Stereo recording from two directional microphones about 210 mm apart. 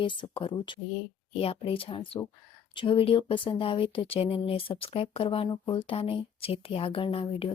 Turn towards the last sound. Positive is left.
turn(degrees=25)  # may be behind; listen again after turning